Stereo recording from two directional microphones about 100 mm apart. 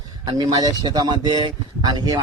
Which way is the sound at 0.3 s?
45° right (ahead or behind).